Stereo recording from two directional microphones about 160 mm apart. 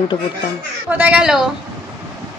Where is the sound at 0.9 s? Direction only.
10° right (ahead or behind).